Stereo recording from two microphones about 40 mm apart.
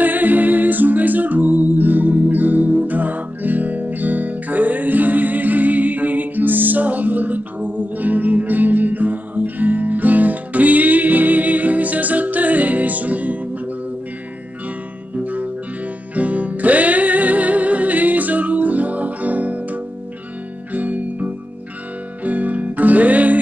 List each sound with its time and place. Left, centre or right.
0.0 s music: right
15.1 s music: right